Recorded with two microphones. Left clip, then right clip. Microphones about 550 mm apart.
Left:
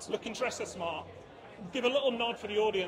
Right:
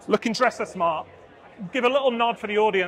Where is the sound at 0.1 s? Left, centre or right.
Right.